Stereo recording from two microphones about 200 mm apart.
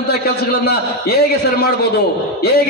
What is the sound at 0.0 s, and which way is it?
A man's voice, 50° left (ahead or behind).